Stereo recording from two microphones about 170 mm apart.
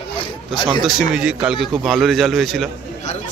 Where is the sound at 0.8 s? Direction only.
5° right (ahead or behind).